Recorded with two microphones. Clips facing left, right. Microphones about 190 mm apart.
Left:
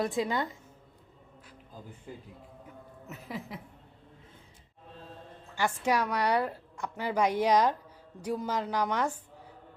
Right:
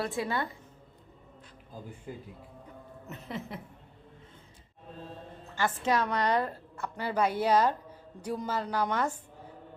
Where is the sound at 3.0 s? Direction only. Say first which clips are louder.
Right 1 dB; 5° left (ahead or behind).